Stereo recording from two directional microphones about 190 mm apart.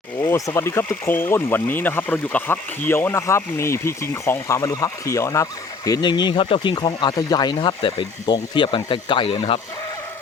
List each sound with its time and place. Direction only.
0.2 s speech: 15° left (ahead or behind)